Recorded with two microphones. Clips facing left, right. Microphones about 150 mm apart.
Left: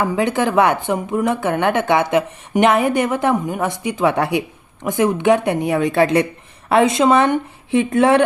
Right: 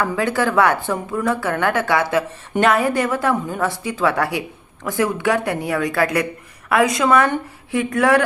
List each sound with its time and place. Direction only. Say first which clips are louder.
0.0 s a woman's voice: left 2 dB; 20° left (ahead or behind)